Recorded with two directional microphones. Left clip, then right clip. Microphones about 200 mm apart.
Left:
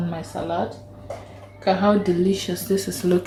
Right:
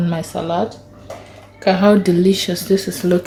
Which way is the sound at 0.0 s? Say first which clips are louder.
Right 6 dB; 45° right (ahead or behind).